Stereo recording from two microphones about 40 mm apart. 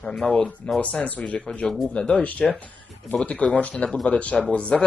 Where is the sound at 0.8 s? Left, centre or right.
Left.